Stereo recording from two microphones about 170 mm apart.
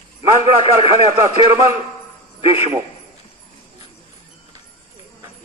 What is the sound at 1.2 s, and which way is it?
Speech, 20° right (ahead or behind).